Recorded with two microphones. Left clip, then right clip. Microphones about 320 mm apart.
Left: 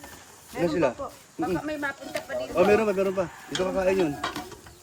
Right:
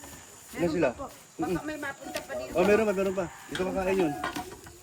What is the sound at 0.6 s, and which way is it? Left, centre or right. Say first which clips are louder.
Speech: left 3 dB; left.